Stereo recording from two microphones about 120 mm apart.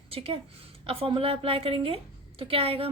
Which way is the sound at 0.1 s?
50° right (ahead or behind).